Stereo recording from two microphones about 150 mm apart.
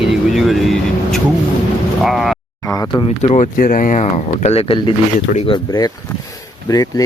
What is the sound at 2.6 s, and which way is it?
Speech, 25° left (ahead or behind).